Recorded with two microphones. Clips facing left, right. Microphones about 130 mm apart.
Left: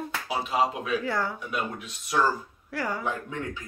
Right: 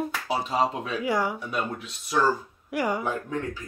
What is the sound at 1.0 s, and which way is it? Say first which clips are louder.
Speech: right 3 dB; 15° right (ahead or behind).